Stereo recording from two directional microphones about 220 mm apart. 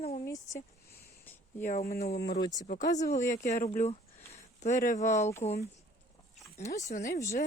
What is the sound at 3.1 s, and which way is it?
Speech, 35° left (ahead or behind).